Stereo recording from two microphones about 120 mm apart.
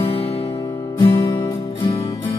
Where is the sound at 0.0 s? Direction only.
55° left (ahead or behind).